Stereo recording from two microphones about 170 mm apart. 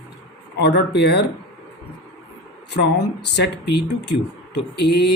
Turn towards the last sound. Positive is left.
turn(degrees=75)  # may be behind; listen again after turning